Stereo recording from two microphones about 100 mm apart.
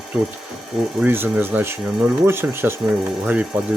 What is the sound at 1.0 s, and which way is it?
Speech, 20° right (ahead or behind).